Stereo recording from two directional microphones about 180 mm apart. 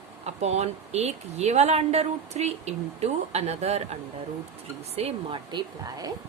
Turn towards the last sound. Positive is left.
turn(degrees=-20)  # may be behind; listen again after turning